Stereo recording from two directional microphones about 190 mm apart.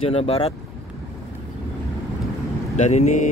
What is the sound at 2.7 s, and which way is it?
Speech, 35° left (ahead or behind).